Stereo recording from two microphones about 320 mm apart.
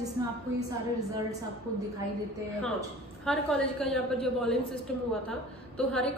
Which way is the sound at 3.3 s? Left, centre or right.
Centre.